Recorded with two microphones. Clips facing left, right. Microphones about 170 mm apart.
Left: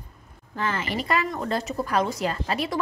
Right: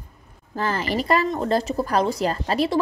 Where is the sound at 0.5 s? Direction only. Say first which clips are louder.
Right 4 dB; 35° right (ahead or behind).